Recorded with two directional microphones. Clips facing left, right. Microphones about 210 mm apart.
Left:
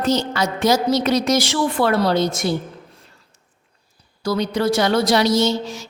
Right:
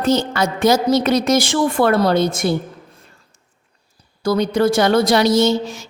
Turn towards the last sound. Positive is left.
turn(degrees=-55)  # may be behind; listen again after turning